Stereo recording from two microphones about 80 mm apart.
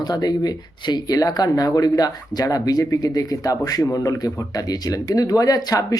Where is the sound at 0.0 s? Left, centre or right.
Left.